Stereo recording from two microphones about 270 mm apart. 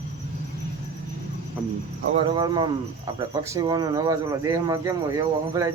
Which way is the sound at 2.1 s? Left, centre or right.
Centre.